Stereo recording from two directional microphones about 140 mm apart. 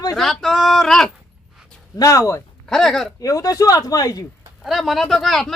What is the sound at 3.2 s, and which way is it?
Speech, 25° left (ahead or behind).